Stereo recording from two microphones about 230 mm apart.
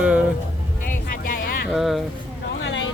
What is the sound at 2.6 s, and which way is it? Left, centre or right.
Vehicle, left.